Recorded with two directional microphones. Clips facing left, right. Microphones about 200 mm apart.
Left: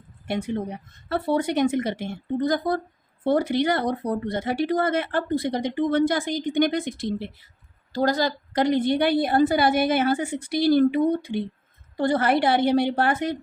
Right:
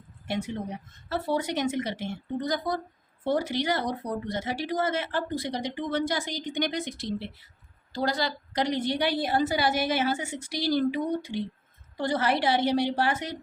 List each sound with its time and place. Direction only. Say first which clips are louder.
0.3 s speech: left 4 dB; 55° left (ahead or behind)